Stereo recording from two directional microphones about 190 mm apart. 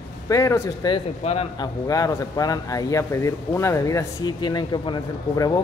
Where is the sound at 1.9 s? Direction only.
20° left (ahead or behind).